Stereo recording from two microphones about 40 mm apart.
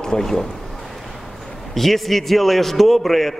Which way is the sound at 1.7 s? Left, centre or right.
Centre.